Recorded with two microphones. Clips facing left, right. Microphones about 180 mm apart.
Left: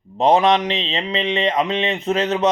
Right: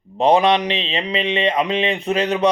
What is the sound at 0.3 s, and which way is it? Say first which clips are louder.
A man's voice: even; 15° right (ahead or behind).